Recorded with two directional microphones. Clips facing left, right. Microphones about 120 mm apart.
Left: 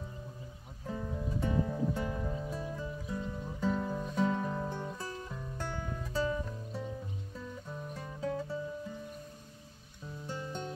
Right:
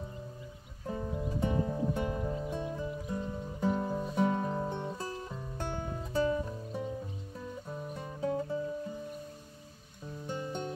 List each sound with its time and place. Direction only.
0.8 s music: 20° right (ahead or behind)
10.2 s music: 20° right (ahead or behind)